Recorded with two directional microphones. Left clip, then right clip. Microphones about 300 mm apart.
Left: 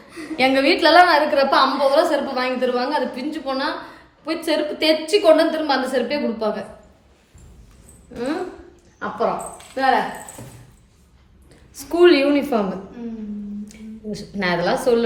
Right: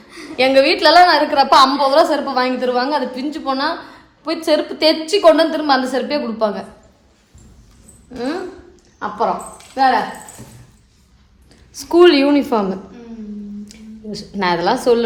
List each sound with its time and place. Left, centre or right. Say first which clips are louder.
0.3 s a woman's voice: right 4 dB; centre
8.1 s a woman's voice: right 2 dB; centre
11.7 s a woman's voice: right 4 dB; centre
13.7 s a sound: right 1 dB; centre